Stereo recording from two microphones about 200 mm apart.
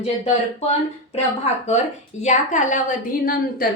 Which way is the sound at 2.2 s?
35° left (ahead or behind).